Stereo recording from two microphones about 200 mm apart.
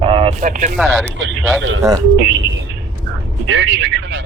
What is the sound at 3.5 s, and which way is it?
Speech, 65° right (ahead or behind).